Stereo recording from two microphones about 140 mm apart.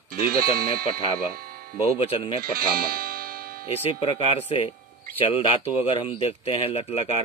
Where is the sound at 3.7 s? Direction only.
40° left (ahead or behind).